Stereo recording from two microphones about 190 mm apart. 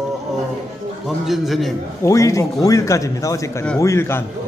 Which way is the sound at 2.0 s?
15° left (ahead or behind).